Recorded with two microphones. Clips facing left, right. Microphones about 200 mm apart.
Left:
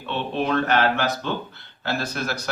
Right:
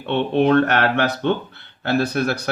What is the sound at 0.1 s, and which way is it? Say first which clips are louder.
Speech: right 8 dB; 60° right (ahead or behind).